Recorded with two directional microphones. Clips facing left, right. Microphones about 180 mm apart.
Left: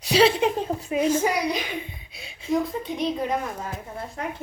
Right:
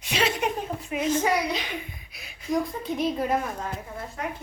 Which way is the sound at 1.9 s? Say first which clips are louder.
Left 3 dB; 25° left (ahead or behind).